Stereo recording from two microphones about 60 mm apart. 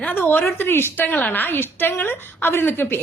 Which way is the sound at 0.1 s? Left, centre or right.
Left.